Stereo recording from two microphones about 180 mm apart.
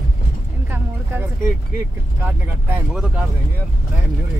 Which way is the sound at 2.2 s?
10° right (ahead or behind).